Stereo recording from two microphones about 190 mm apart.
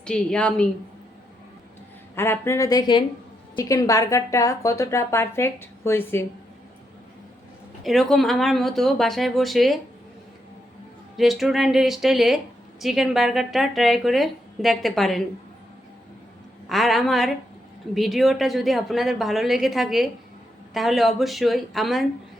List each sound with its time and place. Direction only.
0.0 s a woman's voice: 5° left (ahead or behind)
2.1 s a woman's voice: 10° left (ahead or behind)
7.9 s a woman's voice: centre (ahead or behind)
11.2 s a woman's voice: centre (ahead or behind)
16.6 s a woman's voice: centre (ahead or behind)